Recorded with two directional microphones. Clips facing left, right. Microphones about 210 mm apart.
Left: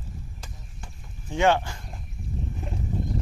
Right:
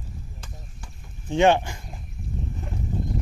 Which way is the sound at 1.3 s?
20° right (ahead or behind).